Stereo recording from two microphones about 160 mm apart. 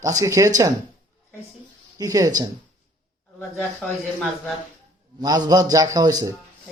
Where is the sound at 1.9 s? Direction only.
25° right (ahead or behind).